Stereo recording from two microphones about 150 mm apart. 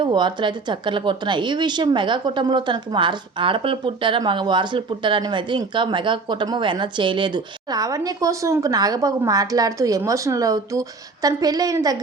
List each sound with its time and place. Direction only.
0.0 s a woman's voice: 30° right (ahead or behind)